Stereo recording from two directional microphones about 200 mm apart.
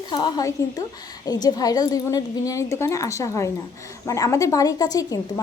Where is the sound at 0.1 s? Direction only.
20° left (ahead or behind).